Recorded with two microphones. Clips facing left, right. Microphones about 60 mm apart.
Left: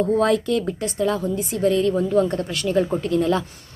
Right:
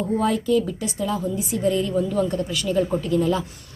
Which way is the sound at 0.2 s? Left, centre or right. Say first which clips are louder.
Left 1 dB; left.